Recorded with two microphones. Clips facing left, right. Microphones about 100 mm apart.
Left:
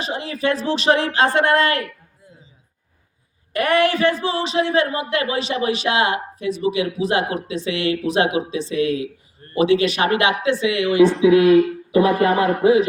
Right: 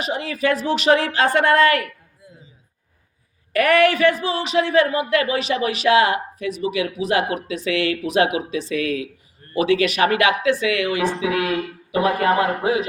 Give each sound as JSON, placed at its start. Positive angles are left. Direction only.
{"t": 0.0, "sound": "a woman's voice", "side_deg": 30}
{"t": 3.5, "sound": "a man's voice", "side_deg": 25}